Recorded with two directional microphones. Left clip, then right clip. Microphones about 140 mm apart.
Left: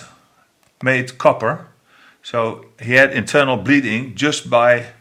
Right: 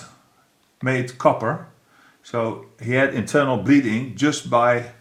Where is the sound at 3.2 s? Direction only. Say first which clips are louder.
Left 4 dB; 50° left (ahead or behind).